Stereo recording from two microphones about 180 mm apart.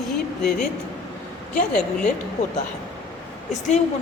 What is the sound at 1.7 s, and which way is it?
Speech, 5° left (ahead or behind).